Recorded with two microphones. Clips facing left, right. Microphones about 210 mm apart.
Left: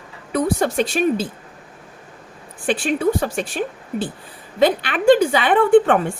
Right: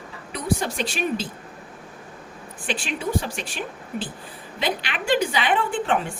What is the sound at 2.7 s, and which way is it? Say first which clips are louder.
Speech: left 8 dB; 50° left (ahead or behind).